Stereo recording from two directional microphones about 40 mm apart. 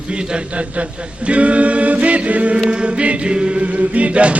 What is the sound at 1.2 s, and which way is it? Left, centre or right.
A capella, right.